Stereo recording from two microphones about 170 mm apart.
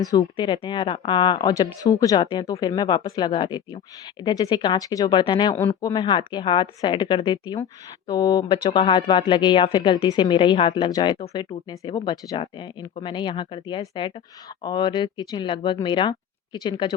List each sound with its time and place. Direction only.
0.0 s speech: 20° left (ahead or behind)